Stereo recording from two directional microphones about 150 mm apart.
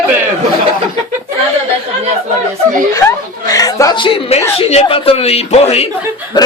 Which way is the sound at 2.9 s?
25° left (ahead or behind).